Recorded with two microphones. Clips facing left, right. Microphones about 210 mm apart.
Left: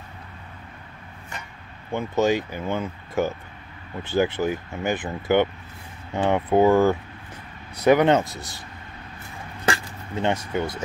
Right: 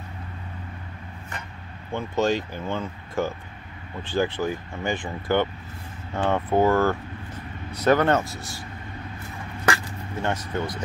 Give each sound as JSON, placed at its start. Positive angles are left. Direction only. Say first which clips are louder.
{"t": 2.0, "sound": "speech", "louder": "left 2 dB", "side_deg": 15}
{"t": 10.2, "sound": "speech", "louder": "left 3 dB", "side_deg": 10}